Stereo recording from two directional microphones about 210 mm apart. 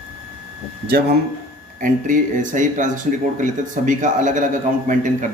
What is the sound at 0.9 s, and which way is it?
Speech, 50° right (ahead or behind).